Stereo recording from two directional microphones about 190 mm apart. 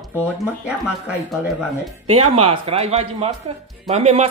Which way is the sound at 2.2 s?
30° right (ahead or behind).